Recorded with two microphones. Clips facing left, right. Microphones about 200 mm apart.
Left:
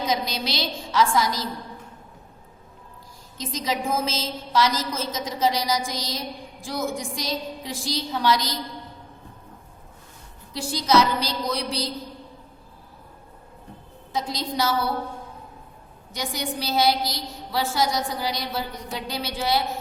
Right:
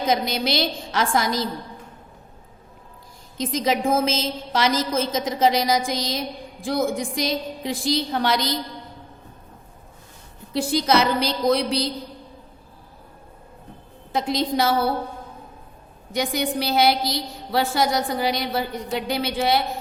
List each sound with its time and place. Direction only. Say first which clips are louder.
0.0 s a woman's voice: right 4 dB; 55° right (ahead or behind)
3.3 s a woman's voice: right 6 dB; 55° right (ahead or behind)
10.5 s a woman's voice: right 1 dB; 60° right (ahead or behind)
14.1 s a woman's voice: right 6 dB; 60° right (ahead or behind)
16.1 s a woman's voice: right 6 dB; 60° right (ahead or behind)